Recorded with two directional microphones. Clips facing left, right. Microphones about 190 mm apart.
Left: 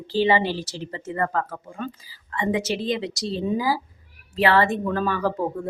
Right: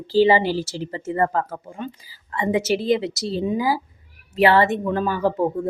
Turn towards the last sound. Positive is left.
turn(degrees=-25)  # may be behind; listen again after turning